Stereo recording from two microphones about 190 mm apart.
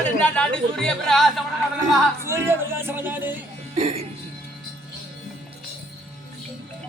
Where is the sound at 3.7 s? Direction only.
30° right (ahead or behind).